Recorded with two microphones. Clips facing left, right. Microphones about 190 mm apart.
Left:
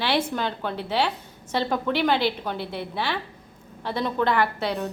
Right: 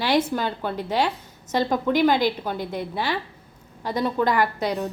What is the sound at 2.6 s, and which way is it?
Speech, 45° right (ahead or behind).